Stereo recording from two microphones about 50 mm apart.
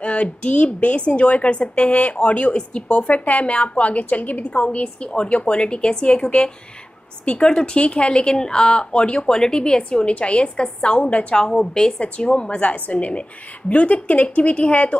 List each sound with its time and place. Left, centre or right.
0.0 s a woman's voice: left
11.3 s a woman's voice: centre